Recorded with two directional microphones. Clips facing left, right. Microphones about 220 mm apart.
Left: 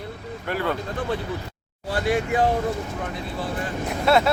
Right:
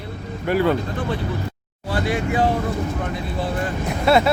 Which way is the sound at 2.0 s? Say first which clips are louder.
Left 1 dB; 50° left (ahead or behind).